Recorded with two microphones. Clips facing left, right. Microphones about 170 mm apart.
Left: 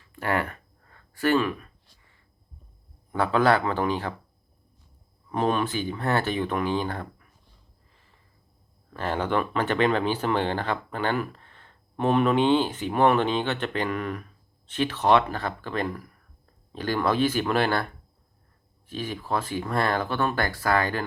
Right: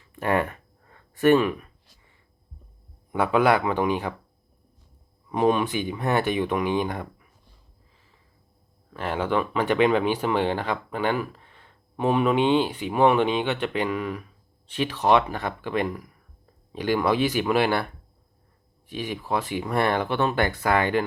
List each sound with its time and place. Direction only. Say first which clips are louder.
0.0 s a sound: right 3 dB; 20° right (ahead or behind)
3.1 s speech: right 1 dB; 15° right (ahead or behind)
5.3 s speech: right 3 dB; 15° right (ahead or behind)
8.9 s speech: right 1 dB; 5° right (ahead or behind)
18.9 s speech: right 1 dB; 15° right (ahead or behind)